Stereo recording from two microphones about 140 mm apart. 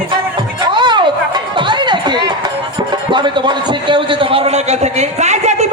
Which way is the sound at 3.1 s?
35° right (ahead or behind).